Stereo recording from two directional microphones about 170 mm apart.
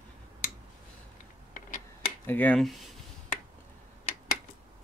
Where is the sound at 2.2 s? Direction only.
10° left (ahead or behind).